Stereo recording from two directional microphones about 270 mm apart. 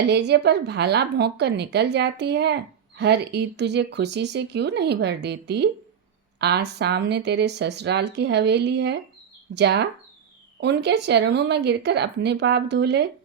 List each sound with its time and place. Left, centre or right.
0.1 s speech: right